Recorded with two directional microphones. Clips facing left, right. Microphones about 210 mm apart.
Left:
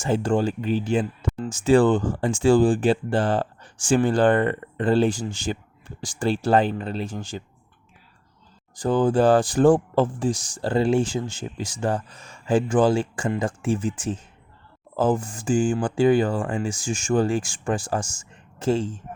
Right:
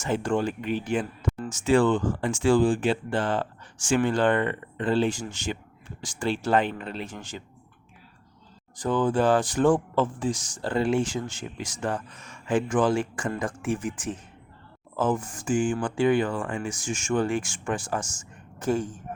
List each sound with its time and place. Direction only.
0.0 s speech: 30° left (ahead or behind)
8.8 s speech: 35° left (ahead or behind)